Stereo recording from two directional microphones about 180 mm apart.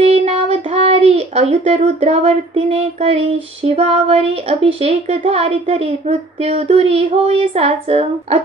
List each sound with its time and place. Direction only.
0.0 s child singing: 40° right (ahead or behind)
4.8 s speech: 35° right (ahead or behind)